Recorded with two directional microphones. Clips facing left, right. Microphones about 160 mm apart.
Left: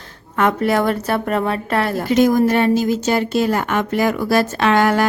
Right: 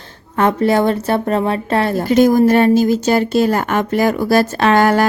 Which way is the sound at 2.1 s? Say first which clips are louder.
Right 3 dB; 35° right (ahead or behind).